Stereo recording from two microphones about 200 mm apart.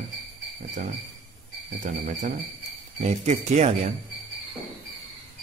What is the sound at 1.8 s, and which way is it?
Speech, 40° right (ahead or behind).